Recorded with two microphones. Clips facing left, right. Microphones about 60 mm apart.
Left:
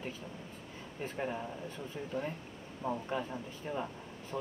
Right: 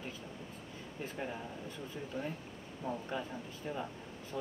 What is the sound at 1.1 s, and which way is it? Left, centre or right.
Speech, left.